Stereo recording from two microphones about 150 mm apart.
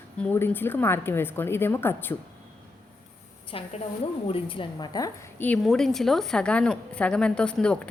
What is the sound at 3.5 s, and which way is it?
A woman's voice, 35° left (ahead or behind).